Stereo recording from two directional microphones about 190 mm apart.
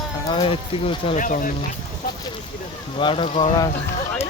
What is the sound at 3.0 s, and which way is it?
Speech, 25° left (ahead or behind).